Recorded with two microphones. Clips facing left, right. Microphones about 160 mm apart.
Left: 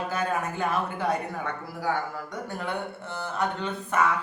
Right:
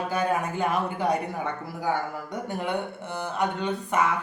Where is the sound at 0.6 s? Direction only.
15° right (ahead or behind).